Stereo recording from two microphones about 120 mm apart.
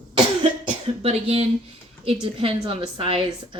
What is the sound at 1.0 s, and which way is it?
Speech, 55° right (ahead or behind).